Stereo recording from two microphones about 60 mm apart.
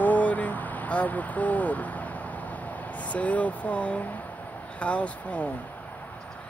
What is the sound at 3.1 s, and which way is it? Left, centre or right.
Speech, left.